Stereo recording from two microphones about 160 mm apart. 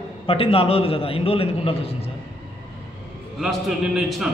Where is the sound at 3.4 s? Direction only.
Centre (ahead or behind).